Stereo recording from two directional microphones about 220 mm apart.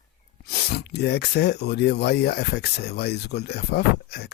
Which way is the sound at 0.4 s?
45° left (ahead or behind).